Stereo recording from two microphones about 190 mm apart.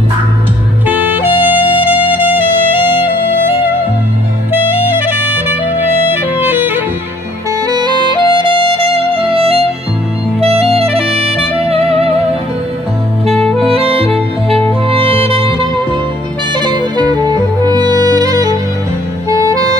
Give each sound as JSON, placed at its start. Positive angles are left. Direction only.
{"t": 0.8, "sound": "music", "side_deg": -10}
{"t": 4.8, "sound": "music", "side_deg": -10}
{"t": 7.6, "sound": "music", "side_deg": -20}
{"t": 11.5, "sound": "saxophone", "side_deg": -30}
{"t": 13.3, "sound": "saxophone", "side_deg": 5}
{"t": 13.7, "sound": "saxophone", "side_deg": -30}
{"t": 14.9, "sound": "music", "side_deg": -30}
{"t": 16.5, "sound": "music", "side_deg": -25}